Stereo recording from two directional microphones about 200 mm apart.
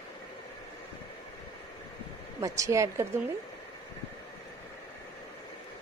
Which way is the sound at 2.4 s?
15° right (ahead or behind).